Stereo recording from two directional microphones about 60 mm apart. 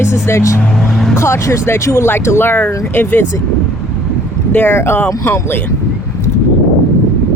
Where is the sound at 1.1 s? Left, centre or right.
Left.